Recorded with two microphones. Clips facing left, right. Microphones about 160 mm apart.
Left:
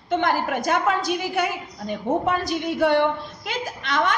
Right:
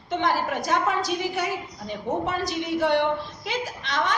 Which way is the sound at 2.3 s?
55° left (ahead or behind).